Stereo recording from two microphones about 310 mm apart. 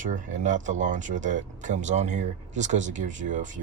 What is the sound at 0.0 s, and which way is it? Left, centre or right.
Speech, right.